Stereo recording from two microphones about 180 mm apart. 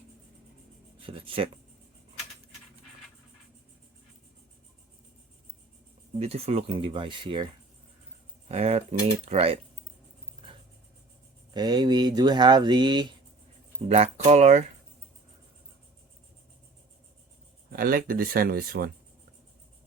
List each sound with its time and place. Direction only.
1.0 s speech: 30° right (ahead or behind)
6.1 s speech: 35° right (ahead or behind)
8.4 s speech: 35° right (ahead or behind)
11.5 s speech: 25° right (ahead or behind)
13.8 s speech: 40° right (ahead or behind)
17.7 s speech: 55° right (ahead or behind)